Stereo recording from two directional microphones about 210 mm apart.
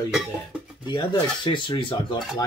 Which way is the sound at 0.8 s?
20° left (ahead or behind).